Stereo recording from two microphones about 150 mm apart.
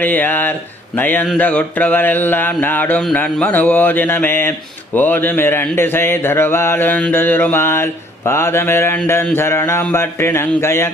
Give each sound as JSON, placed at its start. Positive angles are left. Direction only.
{"t": 0.0, "sound": "speech", "side_deg": 10}